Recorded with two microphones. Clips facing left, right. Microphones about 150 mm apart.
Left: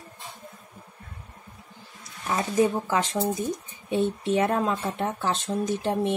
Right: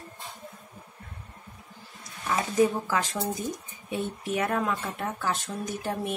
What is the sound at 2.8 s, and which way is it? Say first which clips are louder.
Speech: left 4 dB; 25° left (ahead or behind).